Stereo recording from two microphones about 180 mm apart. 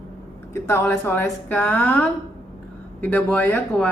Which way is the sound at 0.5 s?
15° left (ahead or behind).